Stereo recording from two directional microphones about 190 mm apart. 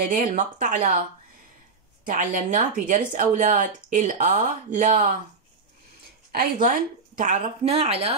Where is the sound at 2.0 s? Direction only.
45° right (ahead or behind).